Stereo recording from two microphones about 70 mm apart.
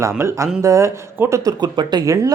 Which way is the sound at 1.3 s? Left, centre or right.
Right.